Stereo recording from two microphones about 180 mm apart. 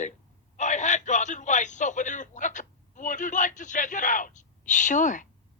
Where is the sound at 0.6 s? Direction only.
40° left (ahead or behind).